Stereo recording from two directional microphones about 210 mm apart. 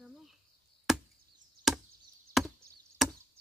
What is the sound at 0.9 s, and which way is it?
Chop, centre (ahead or behind).